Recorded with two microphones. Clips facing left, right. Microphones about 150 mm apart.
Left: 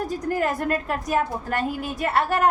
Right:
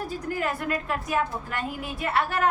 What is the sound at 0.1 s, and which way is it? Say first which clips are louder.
A woman's voice: left 5 dB; 45° left (ahead or behind).